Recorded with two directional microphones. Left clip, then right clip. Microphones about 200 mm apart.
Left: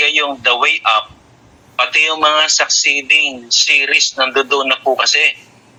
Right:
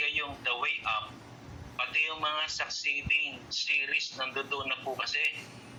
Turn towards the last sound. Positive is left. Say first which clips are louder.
# left 19 dB
turn(degrees=50)  # may be behind; listen again after turning